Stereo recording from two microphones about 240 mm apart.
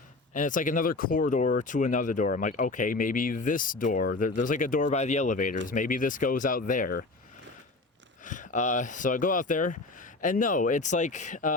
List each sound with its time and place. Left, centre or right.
0.3 s speech: left
8.2 s speech: left